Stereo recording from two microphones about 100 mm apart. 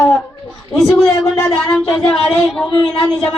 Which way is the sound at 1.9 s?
5° left (ahead or behind).